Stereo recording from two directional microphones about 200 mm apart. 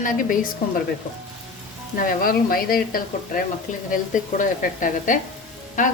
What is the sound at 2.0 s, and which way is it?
Speech, 45° left (ahead or behind).